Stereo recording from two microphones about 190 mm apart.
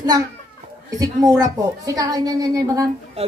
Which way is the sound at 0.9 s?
20° right (ahead or behind).